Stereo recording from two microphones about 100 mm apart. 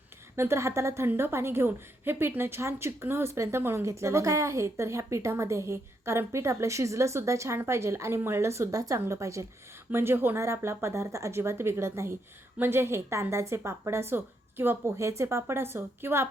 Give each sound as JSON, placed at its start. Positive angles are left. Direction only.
{"t": 0.3, "sound": "a woman's voice", "side_deg": -25}